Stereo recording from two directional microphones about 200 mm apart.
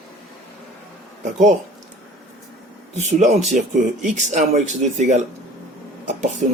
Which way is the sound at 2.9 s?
35° right (ahead or behind).